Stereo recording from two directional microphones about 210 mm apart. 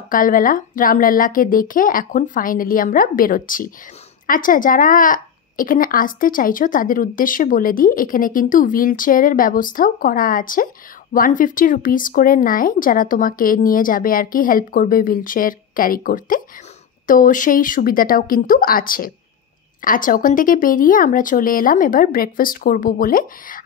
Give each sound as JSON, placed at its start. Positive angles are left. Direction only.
{"t": 0.1, "sound": "a woman's voice", "side_deg": 40}